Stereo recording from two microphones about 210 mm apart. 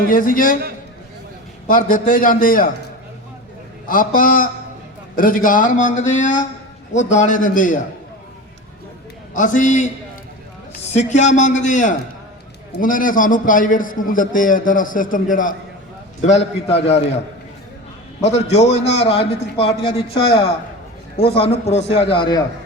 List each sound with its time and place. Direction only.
0.1 s a man's voice: 40° left (ahead or behind)
1.6 s a man's voice: 40° left (ahead or behind)
3.8 s a man's voice: 40° left (ahead or behind)
9.3 s a man's voice: 40° left (ahead or behind)
18.2 s a man's voice: 30° left (ahead or behind)
21.2 s a man's voice: 25° left (ahead or behind)